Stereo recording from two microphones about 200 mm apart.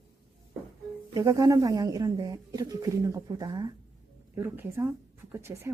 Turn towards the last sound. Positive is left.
turn(degrees=-10)  # may be behind; listen again after turning